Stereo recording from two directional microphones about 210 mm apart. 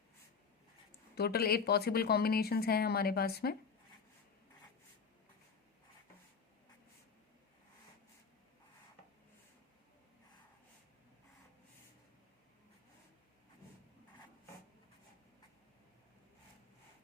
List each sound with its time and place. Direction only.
1.1 s speech: 50° left (ahead or behind)